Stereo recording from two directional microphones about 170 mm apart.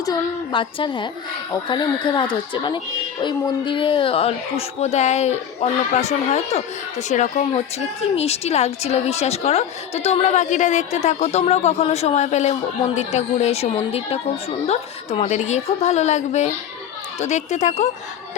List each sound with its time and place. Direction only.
0.0 s a woman's voice: 25° left (ahead or behind); by 17.8 s 45° left (ahead or behind)